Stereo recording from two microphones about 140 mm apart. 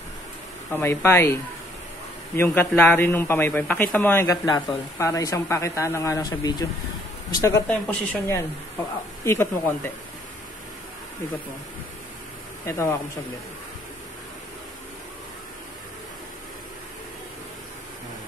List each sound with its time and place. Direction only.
0.7 s a man's voice: 15° left (ahead or behind)
7.6 s a man's voice: 10° left (ahead or behind)
9.2 s a man's voice: 20° left (ahead or behind)
12.6 s speech: 20° left (ahead or behind)